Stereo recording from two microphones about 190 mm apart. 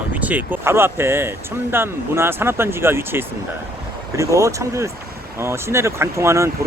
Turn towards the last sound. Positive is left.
turn(degrees=-15)  # may be behind; listen again after turning